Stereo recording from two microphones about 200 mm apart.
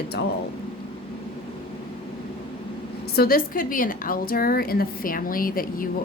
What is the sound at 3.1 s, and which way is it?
Speech, 50° left (ahead or behind).